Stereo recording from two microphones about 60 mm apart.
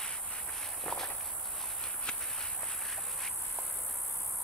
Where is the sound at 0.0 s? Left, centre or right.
Centre.